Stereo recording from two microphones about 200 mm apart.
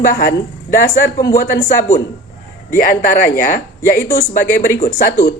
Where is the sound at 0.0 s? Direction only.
45° left (ahead or behind).